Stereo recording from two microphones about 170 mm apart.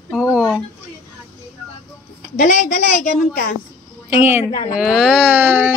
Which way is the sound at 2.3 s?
55° left (ahead or behind).